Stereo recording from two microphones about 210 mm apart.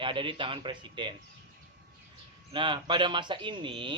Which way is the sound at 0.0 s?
25° right (ahead or behind).